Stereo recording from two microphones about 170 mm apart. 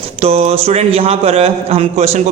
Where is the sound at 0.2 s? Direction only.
35° right (ahead or behind).